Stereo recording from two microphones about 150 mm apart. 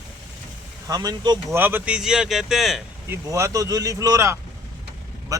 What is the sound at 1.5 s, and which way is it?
Speech, 15° right (ahead or behind).